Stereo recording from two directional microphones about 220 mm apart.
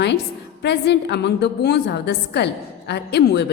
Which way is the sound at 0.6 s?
50° left (ahead or behind).